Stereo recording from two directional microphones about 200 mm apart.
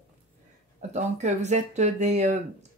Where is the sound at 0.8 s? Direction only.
35° right (ahead or behind).